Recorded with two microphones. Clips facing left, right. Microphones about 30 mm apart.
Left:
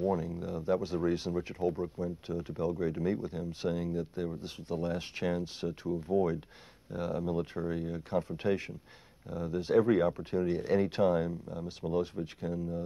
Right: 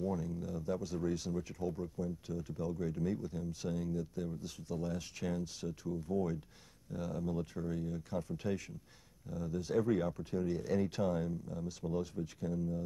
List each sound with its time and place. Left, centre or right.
0.0 s speech: left